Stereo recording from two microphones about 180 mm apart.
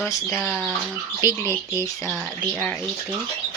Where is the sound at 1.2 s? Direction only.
20° left (ahead or behind).